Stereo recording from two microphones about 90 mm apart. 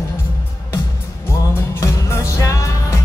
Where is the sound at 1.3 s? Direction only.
30° left (ahead or behind).